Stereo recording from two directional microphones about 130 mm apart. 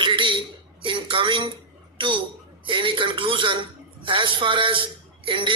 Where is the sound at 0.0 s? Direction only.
40° right (ahead or behind).